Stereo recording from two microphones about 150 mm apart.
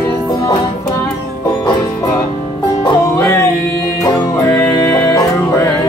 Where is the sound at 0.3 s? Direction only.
20° left (ahead or behind).